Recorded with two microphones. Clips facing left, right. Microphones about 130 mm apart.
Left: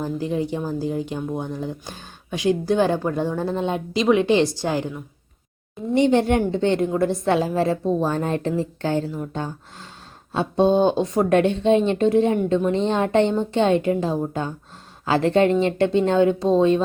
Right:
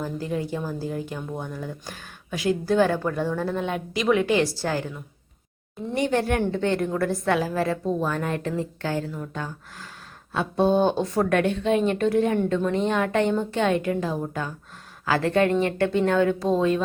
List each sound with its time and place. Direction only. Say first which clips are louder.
0.0 s speech: left 4 dB; 20° left (ahead or behind)